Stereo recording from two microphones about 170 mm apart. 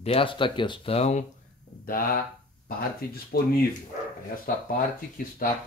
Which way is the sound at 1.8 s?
60° left (ahead or behind).